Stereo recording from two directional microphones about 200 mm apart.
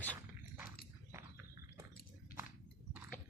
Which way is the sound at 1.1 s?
15° right (ahead or behind).